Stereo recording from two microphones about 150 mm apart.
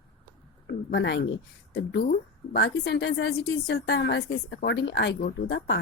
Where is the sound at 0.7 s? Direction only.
90° left.